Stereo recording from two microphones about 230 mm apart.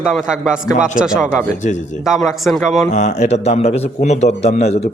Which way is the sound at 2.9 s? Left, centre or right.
Left.